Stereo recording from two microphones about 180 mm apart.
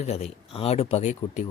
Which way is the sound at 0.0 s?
35° left (ahead or behind).